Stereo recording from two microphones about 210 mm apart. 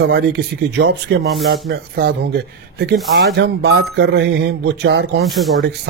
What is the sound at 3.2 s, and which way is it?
A man's voice, 55° right (ahead or behind).